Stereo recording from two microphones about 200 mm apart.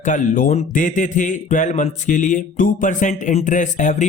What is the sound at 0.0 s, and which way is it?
Speech, 40° left (ahead or behind).